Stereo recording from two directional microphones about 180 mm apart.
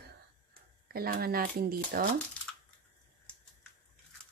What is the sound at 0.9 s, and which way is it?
A woman's voice, 55° right (ahead or behind).